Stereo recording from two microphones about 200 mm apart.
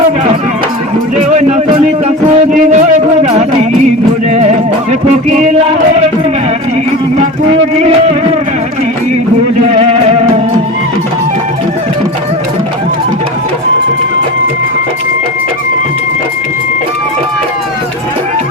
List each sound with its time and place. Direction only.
1.1 s music: 35° right (ahead or behind)
7.8 s a sound: 30° right (ahead or behind)
9.7 s music: 30° right (ahead or behind)